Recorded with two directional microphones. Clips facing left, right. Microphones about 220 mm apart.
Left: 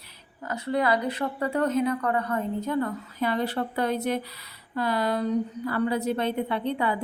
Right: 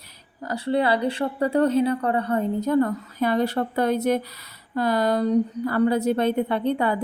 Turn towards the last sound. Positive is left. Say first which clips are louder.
# right 4 dB
turn(degrees=-45)  # may be behind; listen again after turning